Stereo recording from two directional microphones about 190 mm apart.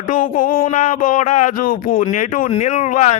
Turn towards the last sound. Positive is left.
turn(degrees=35)  # may be behind; listen again after turning